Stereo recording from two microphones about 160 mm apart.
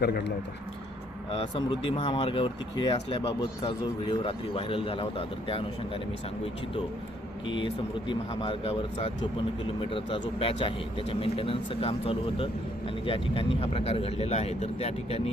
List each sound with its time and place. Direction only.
0.0 s speech: 90° left
1.3 s speech: 35° left (ahead or behind)
7.4 s speech: 30° left (ahead or behind)